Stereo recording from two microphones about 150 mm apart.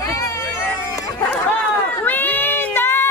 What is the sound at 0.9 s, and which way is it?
Chatter, 20° left (ahead or behind).